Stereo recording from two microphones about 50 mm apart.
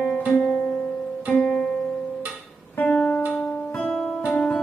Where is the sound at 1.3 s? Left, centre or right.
Left.